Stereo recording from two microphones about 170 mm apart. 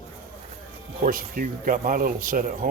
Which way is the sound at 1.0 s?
55° right (ahead or behind).